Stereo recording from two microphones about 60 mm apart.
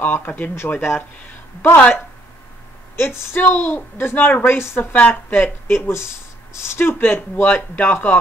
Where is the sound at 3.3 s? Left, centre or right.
Left.